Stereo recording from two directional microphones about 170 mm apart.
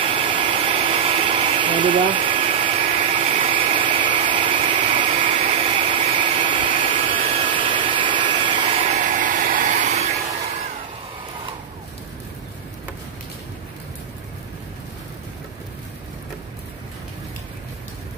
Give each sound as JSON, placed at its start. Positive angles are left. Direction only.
{"t": 0.0, "sound": "a sound", "side_deg": -30}
{"t": 5.5, "sound": "vacuum cleaner", "side_deg": -30}
{"t": 8.9, "sound": "vehicle", "side_deg": -50}